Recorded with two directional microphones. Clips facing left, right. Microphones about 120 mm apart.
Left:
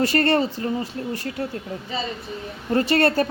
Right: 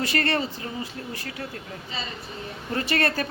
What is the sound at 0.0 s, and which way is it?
A woman's voice, 35° left (ahead or behind).